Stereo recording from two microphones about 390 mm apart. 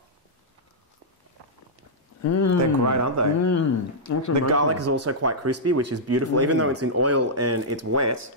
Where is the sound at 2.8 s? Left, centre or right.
Right.